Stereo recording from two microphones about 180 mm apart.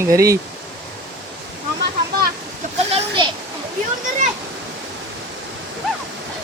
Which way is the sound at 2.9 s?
30° right (ahead or behind).